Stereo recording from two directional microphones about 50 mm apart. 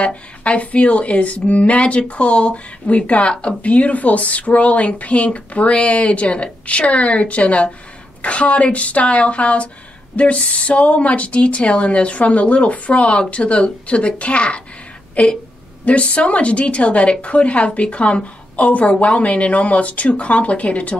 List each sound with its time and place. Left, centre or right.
0.0 s speech: left
15.2 s a sound: left
15.8 s speech: left